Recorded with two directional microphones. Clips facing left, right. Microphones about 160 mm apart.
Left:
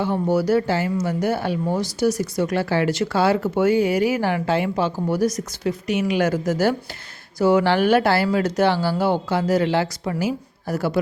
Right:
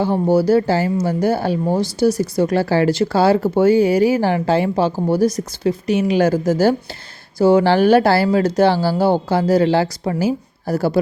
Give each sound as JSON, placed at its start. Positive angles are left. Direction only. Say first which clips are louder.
{"t": 0.0, "sound": "speech", "louder": "right 5 dB", "side_deg": -30}